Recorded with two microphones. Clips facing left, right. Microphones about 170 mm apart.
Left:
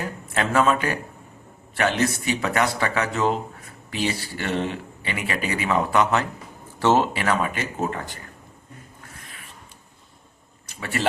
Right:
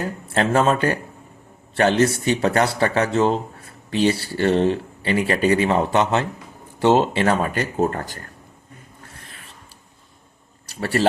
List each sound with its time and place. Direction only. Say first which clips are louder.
0.3 s speech: right 2 dB; 30° right (ahead or behind)
7.8 s speech: right 7 dB; 50° right (ahead or behind)
10.7 s speech: right 6 dB; 35° right (ahead or behind)